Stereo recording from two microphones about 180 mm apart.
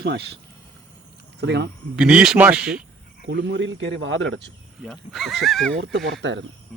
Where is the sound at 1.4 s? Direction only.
75° right (ahead or behind).